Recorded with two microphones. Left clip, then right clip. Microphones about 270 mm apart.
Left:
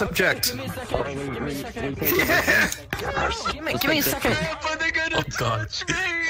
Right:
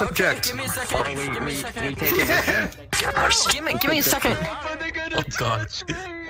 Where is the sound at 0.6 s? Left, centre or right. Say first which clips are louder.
Right 3 dB; right.